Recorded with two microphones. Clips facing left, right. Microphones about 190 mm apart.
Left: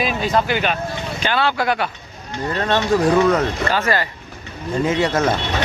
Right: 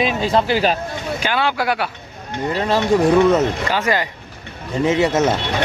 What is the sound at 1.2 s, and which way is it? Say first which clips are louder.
Speech: left 1 dB; 10° right (ahead or behind).